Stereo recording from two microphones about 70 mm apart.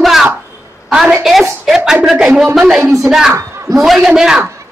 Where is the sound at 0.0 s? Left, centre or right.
Centre.